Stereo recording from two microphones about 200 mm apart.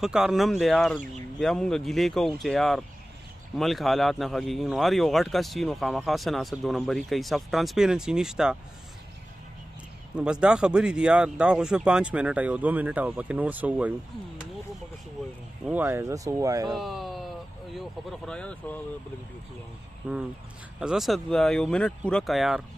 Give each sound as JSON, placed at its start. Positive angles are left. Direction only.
{"t": 0.0, "sound": "speech", "side_deg": 0}
{"t": 10.1, "sound": "speech", "side_deg": -5}
{"t": 15.6, "sound": "speech", "side_deg": -10}
{"t": 16.7, "sound": "speech", "side_deg": 0}
{"t": 20.0, "sound": "speech", "side_deg": -5}